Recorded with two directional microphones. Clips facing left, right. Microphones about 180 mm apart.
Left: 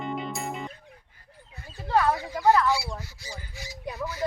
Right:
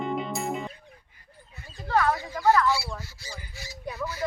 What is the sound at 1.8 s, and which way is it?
Bird, 15° left (ahead or behind).